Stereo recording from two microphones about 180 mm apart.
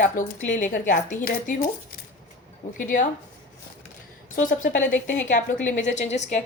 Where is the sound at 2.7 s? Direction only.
45° left (ahead or behind).